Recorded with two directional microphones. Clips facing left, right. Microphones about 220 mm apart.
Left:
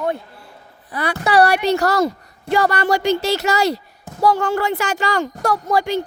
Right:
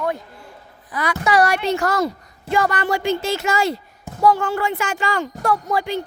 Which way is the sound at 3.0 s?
70° left (ahead or behind).